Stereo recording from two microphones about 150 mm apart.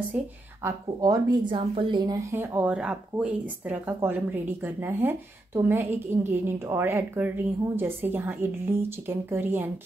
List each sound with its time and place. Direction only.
0.7 s a woman's voice: 25° right (ahead or behind)
2.3 s speech: 15° right (ahead or behind)